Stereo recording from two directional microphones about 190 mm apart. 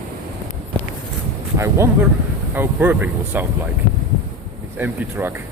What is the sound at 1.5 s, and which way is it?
Speech, 15° right (ahead or behind).